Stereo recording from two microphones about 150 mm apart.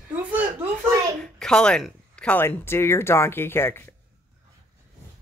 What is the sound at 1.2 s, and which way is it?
Speech, 5° left (ahead or behind).